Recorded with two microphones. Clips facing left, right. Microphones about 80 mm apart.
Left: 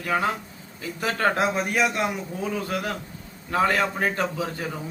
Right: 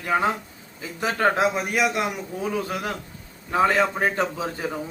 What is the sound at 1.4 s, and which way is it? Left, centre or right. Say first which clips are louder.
Speech: right 1 dB; centre.